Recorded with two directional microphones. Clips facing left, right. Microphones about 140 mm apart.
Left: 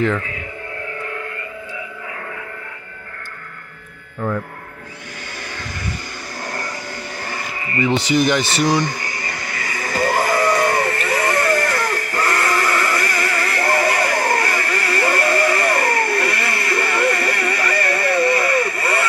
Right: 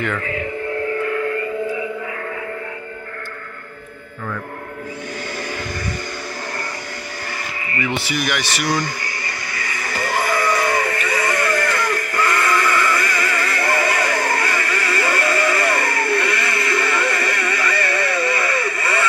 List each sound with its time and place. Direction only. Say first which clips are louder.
7.8 s speech: left 7 dB; 30° left (ahead or behind)
10.2 s sheep: even; 35° left (ahead or behind)